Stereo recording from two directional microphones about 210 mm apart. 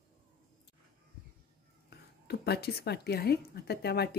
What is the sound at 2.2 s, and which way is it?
Speech, 50° left (ahead or behind).